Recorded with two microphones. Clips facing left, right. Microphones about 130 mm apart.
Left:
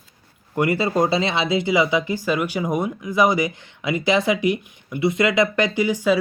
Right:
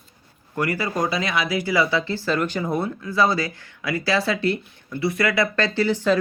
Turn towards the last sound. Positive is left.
turn(degrees=10)  # may be behind; listen again after turning